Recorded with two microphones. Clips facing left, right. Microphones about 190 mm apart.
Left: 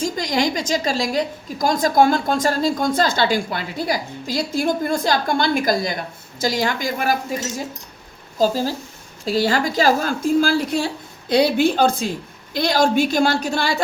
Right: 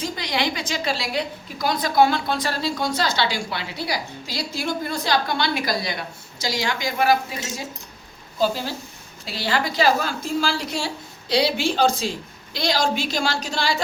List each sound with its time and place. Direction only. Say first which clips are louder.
0.0 s a woman's voice: left 5 dB; 45° left (ahead or behind)